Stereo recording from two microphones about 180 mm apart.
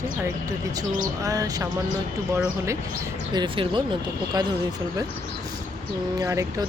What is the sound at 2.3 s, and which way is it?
Speech, 15° right (ahead or behind).